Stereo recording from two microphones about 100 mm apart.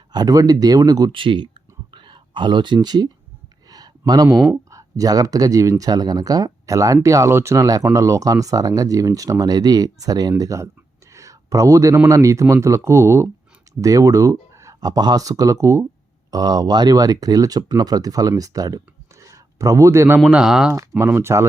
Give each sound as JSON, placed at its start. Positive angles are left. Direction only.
{"t": 0.1, "sound": "speech", "side_deg": -40}
{"t": 1.1, "sound": "speech", "side_deg": -60}
{"t": 1.9, "sound": "a sound", "side_deg": -55}
{"t": 4.7, "sound": "speech", "side_deg": -35}
{"t": 11.1, "sound": "a sound", "side_deg": -35}
{"t": 12.0, "sound": "speech", "side_deg": -35}
{"t": 16.3, "sound": "speech", "side_deg": -40}
{"t": 20.3, "sound": "speech", "side_deg": -5}
{"t": 21.0, "sound": "speech", "side_deg": -25}